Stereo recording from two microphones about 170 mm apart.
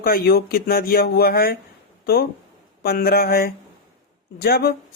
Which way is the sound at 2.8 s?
60° left (ahead or behind).